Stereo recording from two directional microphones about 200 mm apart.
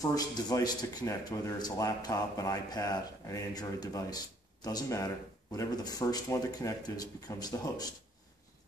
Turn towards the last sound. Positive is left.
turn(degrees=20)  # may be behind; listen again after turning